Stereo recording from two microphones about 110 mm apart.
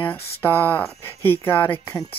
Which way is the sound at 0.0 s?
20° left (ahead or behind).